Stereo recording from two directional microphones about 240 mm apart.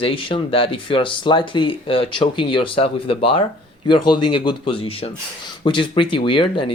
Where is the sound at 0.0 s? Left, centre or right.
Left.